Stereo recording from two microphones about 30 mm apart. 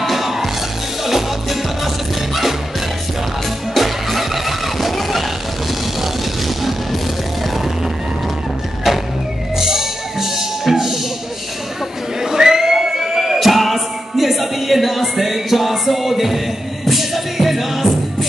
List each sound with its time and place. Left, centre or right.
0.1 s music: centre
3.7 s music: centre
8.9 s music: centre
12.2 s buzzer: centre
13.4 s music: centre